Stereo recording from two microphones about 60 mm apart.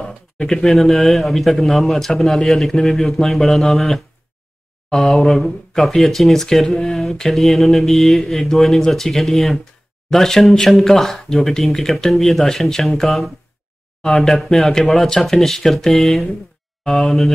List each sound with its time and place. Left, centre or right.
0.4 s speech: centre